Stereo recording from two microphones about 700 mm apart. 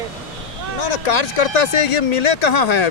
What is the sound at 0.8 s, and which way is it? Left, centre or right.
Speech, left.